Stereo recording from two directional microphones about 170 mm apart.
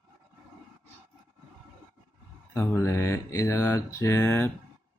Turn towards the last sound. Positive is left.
turn(degrees=10)  # may be behind; listen again after turning